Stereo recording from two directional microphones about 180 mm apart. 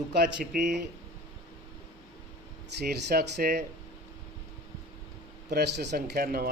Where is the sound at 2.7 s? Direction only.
65° right (ahead or behind).